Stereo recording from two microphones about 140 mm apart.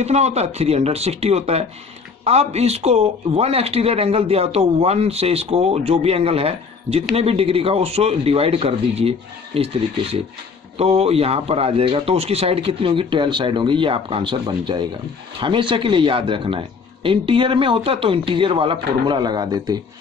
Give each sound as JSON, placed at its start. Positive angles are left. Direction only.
{"t": 0.0, "sound": "a man's voice", "side_deg": -50}
{"t": 10.8, "sound": "speech", "side_deg": -45}